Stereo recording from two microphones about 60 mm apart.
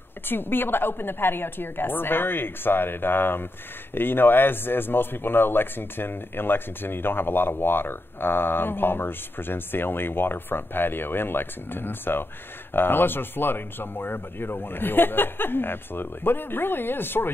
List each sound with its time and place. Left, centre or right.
0.3 s speech: left